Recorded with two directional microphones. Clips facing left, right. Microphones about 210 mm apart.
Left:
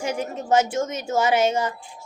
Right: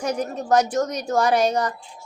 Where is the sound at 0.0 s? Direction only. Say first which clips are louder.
Right 2 dB; 25° left (ahead or behind).